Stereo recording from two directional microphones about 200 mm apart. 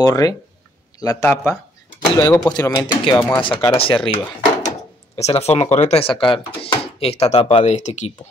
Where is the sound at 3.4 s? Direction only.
25° left (ahead or behind).